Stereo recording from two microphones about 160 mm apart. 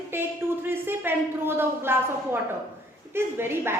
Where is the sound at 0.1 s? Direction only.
15° right (ahead or behind).